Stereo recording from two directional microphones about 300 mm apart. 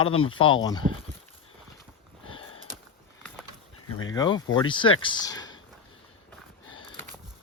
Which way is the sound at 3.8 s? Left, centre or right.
Left.